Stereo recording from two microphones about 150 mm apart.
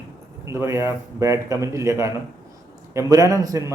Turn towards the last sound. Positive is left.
turn(degrees=-20)  # may be behind; listen again after turning